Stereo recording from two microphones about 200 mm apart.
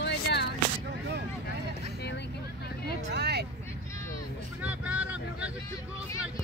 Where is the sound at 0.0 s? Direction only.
55° left (ahead or behind).